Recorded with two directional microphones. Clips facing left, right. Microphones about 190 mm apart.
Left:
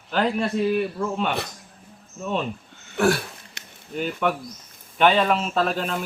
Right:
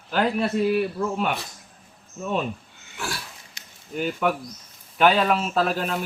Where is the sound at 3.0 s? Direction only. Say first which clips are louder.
Left 13 dB; 60° left (ahead or behind).